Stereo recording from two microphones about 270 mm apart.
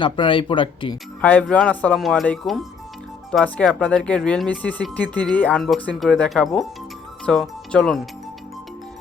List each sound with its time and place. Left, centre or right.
0.0 s speech: centre
1.2 s speech: centre